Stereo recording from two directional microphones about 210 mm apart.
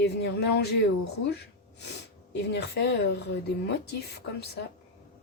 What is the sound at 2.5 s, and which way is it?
Speech, 55° left (ahead or behind).